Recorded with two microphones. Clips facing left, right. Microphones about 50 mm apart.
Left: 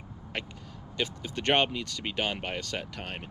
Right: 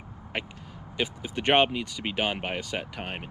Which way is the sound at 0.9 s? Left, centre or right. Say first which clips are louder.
Right 2 dB; centre.